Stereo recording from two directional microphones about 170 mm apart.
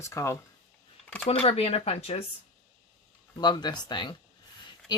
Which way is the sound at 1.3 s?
35° left (ahead or behind).